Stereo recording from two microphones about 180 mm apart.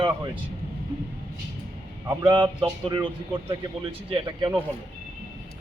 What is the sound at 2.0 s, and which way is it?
A man's voice, 25° right (ahead or behind).